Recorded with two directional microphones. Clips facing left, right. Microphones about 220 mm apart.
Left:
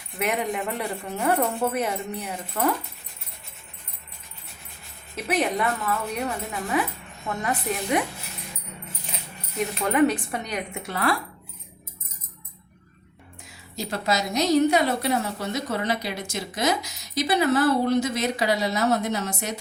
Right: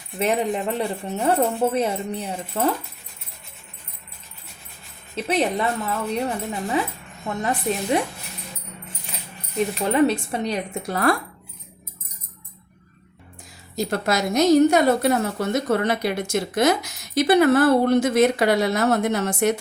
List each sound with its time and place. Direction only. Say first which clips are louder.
0.2 s speech: right 4 dB; 30° right (ahead or behind)
5.1 s speech: right 3 dB; 30° right (ahead or behind)
9.8 s speech: right 1 dB; 25° right (ahead or behind)
10.9 s speech: right 4 dB; 45° right (ahead or behind)
13.7 s speech: right 4 dB; 55° right (ahead or behind)